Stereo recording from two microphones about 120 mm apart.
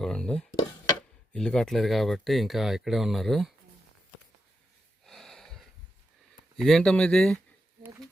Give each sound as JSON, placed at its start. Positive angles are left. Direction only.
{"t": 0.0, "sound": "dishes", "side_deg": 5}
{"t": 1.3, "sound": "speech", "side_deg": 5}
{"t": 5.0, "sound": "a sound", "side_deg": 0}
{"t": 6.6, "sound": "speech", "side_deg": 5}
{"t": 7.8, "sound": "wild animals", "side_deg": -20}